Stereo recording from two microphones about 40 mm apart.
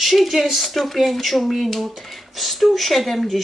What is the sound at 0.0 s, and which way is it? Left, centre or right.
Speech, centre.